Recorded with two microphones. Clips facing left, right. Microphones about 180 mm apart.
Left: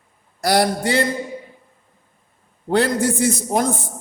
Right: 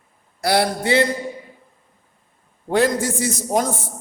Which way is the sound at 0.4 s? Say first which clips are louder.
Left 1 dB; 50° left (ahead or behind).